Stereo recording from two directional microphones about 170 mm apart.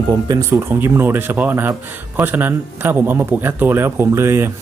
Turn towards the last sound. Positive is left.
turn(degrees=-15)  # may be behind; listen again after turning